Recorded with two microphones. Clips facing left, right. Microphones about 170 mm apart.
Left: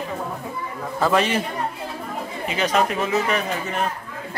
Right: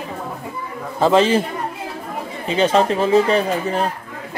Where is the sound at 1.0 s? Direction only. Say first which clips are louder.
Right 6 dB; 25° right (ahead or behind).